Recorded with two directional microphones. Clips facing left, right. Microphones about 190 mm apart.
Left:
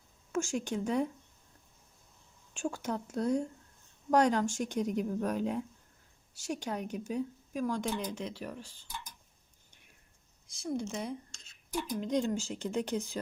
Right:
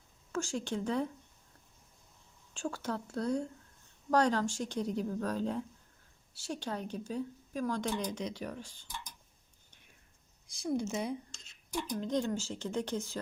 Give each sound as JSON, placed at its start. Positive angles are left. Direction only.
{"t": 0.5, "sound": "a woman's voice", "side_deg": 15}
{"t": 2.5, "sound": "a woman's voice", "side_deg": 15}
{"t": 10.7, "sound": "a woman's voice", "side_deg": -5}